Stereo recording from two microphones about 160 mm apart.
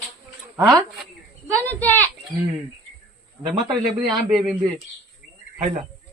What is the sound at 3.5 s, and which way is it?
Speech, 30° right (ahead or behind).